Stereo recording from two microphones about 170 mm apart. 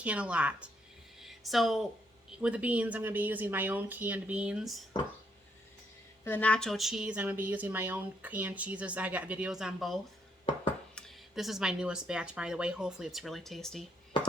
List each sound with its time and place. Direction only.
0.0 s speech: 10° right (ahead or behind)
1.2 s a sound: centre (ahead or behind)
2.4 s speech: 10° right (ahead or behind)
6.2 s speech: 10° left (ahead or behind)